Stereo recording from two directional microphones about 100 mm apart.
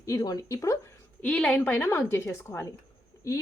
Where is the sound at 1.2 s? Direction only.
10° left (ahead or behind).